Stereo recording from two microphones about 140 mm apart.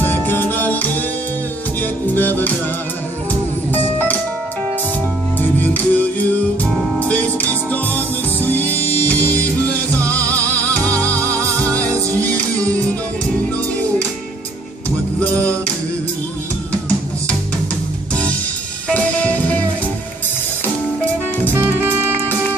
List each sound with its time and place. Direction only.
0.0 s music: 15° left (ahead or behind)
5.4 s music: 15° left (ahead or behind)
11.1 s music: 20° right (ahead or behind)
12.2 s music: 10° left (ahead or behind)
18.9 s music: 10° left (ahead or behind)
21.5 s music: 15° right (ahead or behind)